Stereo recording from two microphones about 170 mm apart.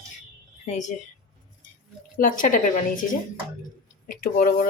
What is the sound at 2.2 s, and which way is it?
Speech, 50° left (ahead or behind).